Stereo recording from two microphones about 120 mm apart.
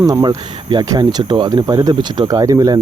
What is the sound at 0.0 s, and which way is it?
Speech, 35° right (ahead or behind).